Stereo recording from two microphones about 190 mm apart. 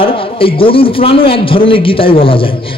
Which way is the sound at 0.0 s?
30° left (ahead or behind).